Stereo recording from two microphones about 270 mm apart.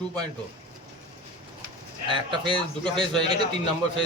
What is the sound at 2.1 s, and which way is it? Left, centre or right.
Speech, centre.